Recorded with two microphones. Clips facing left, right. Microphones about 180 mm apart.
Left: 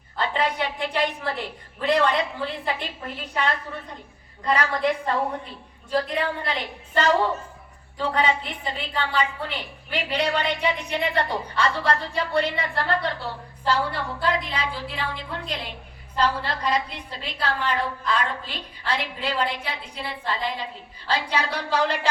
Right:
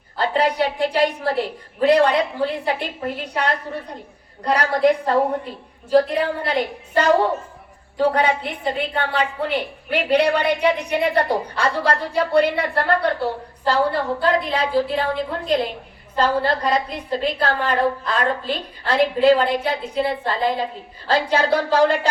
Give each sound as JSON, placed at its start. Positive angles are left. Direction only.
{"t": 0.2, "sound": "a sound", "side_deg": -40}
{"t": 0.6, "sound": "a woman's voice", "side_deg": -40}
{"t": 2.4, "sound": "a woman's voice", "side_deg": -50}
{"t": 7.9, "sound": "a woman's voice", "side_deg": -55}
{"t": 13.7, "sound": "a woman's voice", "side_deg": -45}